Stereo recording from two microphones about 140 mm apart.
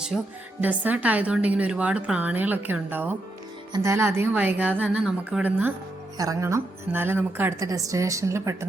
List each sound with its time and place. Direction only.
0.1 s speech: centre (ahead or behind)
0.6 s a woman's voice: 10° right (ahead or behind)
6.1 s a woman's voice: 20° right (ahead or behind)